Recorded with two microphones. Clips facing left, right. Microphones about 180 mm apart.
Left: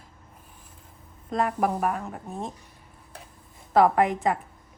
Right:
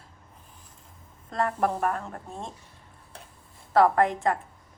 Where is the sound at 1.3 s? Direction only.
10° left (ahead or behind).